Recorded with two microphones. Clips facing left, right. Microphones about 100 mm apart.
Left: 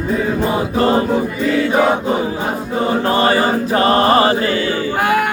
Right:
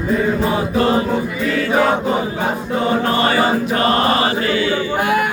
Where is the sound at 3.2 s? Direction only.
35° left (ahead or behind).